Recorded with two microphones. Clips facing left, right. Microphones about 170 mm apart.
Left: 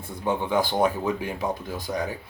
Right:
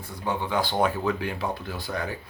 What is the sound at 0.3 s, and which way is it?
Speech, 20° left (ahead or behind).